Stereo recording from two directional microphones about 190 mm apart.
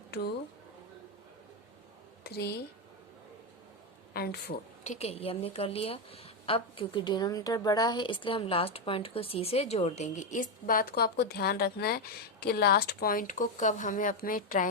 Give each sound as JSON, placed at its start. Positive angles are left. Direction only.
{"t": 2.2, "sound": "speech", "side_deg": 60}
{"t": 4.1, "sound": "speech", "side_deg": 55}
{"t": 4.8, "sound": "a woman's voice", "side_deg": 35}